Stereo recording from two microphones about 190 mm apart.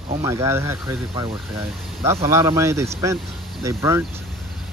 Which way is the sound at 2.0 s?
15° right (ahead or behind).